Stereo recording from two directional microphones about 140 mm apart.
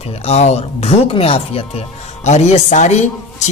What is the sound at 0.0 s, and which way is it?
Speech, 50° left (ahead or behind).